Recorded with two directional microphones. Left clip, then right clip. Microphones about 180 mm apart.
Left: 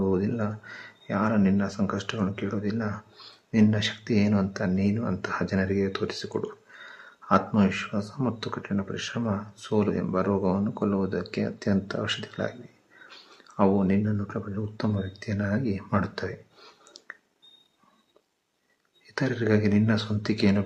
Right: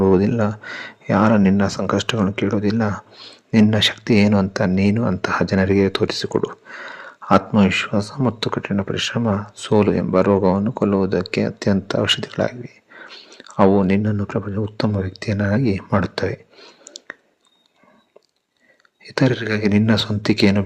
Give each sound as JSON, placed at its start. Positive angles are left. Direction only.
{"t": 0.0, "sound": "speech", "side_deg": -45}
{"t": 13.1, "sound": "whispering", "side_deg": -20}
{"t": 13.4, "sound": "speech", "side_deg": -35}
{"t": 16.6, "sound": "clicking", "side_deg": -20}
{"t": 19.0, "sound": "speech", "side_deg": -40}